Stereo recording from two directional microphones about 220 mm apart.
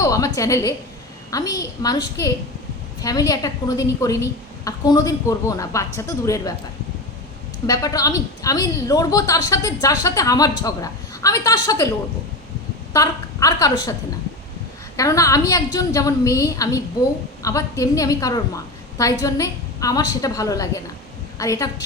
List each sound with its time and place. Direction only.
0.0 s a sound: 15° left (ahead or behind)
1.3 s a woman's voice: 15° left (ahead or behind)
7.7 s a woman's voice: 15° left (ahead or behind)
12.9 s a woman's voice: 15° left (ahead or behind)
14.9 s a woman's voice: 15° left (ahead or behind)